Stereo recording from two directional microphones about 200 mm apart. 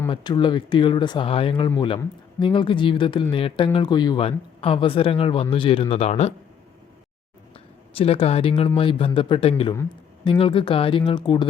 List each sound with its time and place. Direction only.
0.1 s speech: 25° left (ahead or behind)
7.9 s speech: 30° left (ahead or behind)